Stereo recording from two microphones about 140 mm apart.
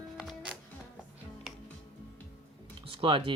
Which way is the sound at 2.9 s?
40° right (ahead or behind).